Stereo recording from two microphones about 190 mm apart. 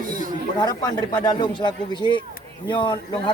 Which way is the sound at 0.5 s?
20° left (ahead or behind).